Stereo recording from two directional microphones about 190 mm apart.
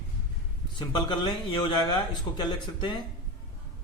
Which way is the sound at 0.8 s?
25° left (ahead or behind).